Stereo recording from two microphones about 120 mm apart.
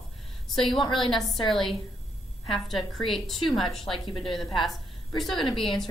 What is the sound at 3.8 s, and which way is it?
Speech, 45° left (ahead or behind).